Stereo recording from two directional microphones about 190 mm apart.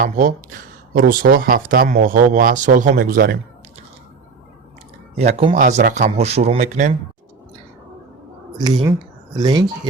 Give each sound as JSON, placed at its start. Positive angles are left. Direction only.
{"t": 0.0, "sound": "speech", "side_deg": -40}
{"t": 5.1, "sound": "speech", "side_deg": -30}
{"t": 5.5, "sound": "speech", "side_deg": -50}
{"t": 8.5, "sound": "speech", "side_deg": -20}